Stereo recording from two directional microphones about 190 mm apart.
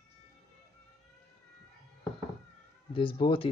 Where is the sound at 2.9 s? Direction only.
25° left (ahead or behind).